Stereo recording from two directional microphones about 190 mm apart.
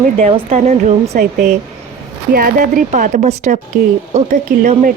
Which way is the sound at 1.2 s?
55° right (ahead or behind).